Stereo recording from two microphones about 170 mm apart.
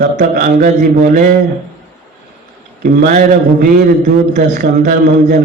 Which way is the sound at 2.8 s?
55° right (ahead or behind).